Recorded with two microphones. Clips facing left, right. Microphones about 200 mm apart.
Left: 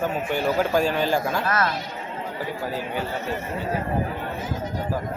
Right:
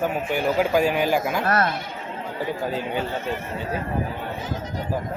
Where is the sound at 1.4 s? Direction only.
40° right (ahead or behind).